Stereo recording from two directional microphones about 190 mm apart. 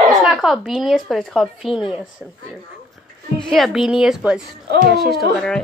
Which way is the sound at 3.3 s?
Centre (ahead or behind).